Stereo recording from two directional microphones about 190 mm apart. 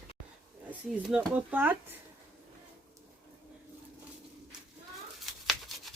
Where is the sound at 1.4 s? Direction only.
10° right (ahead or behind).